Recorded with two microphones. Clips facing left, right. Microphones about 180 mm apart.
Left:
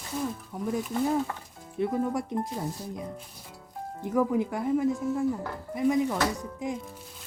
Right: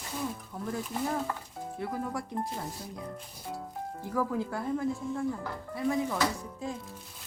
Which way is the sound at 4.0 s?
20° left (ahead or behind).